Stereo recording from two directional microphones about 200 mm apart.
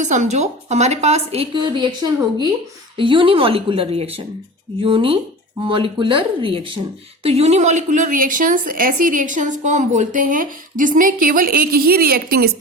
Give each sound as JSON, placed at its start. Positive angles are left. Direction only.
{"t": 0.0, "sound": "a woman's voice", "side_deg": -40}
{"t": 3.0, "sound": "a woman's voice", "side_deg": -25}